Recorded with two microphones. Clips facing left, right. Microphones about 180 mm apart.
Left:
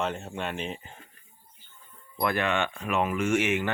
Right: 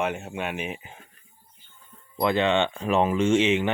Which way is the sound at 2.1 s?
20° right (ahead or behind).